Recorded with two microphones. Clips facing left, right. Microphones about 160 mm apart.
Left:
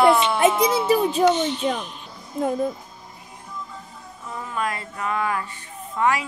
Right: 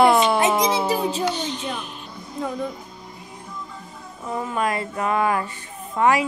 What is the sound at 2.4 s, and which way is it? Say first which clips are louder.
Speech: left 4 dB; 50° left (ahead or behind).